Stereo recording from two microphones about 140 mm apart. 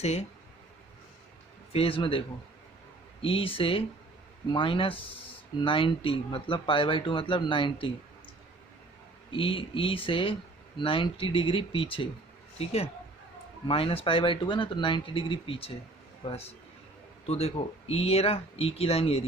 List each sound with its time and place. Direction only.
0.0 s speech: 50° left (ahead or behind)
1.7 s speech: 40° left (ahead or behind)
9.3 s speech: 40° left (ahead or behind)